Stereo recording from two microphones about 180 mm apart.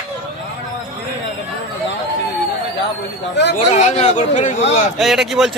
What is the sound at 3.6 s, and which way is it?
A man's voice, 40° left (ahead or behind).